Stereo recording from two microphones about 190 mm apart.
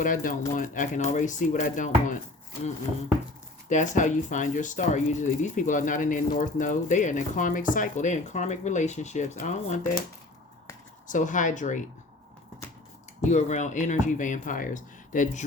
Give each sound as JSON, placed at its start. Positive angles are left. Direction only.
{"t": 0.0, "sound": "speech", "side_deg": 45}
{"t": 3.7, "sound": "speech", "side_deg": 40}
{"t": 11.1, "sound": "speech", "side_deg": 40}
{"t": 13.2, "sound": "speech", "side_deg": 40}